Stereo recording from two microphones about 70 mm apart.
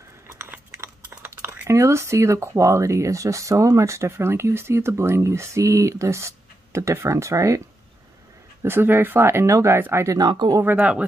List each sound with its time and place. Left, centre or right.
0.4 s a sound: right
1.7 s speech: right
8.6 s speech: right
10.0 s speech: right
10.8 s speech: centre